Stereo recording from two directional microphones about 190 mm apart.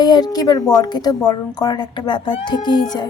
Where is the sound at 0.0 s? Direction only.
20° left (ahead or behind).